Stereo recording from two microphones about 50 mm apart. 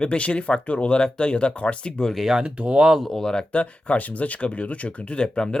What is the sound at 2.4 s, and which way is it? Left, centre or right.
Speech, centre.